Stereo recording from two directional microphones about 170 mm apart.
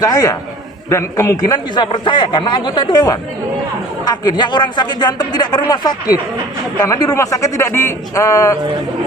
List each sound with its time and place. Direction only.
0.0 s a man's voice: 20° left (ahead or behind)